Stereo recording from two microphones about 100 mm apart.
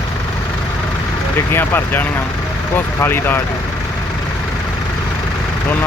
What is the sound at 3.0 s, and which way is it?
Speech, 20° left (ahead or behind).